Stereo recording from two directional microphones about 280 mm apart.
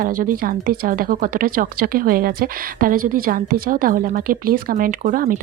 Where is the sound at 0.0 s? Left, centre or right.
Right.